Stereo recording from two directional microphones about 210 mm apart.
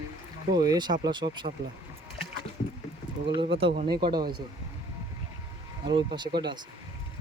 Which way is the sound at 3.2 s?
25° right (ahead or behind).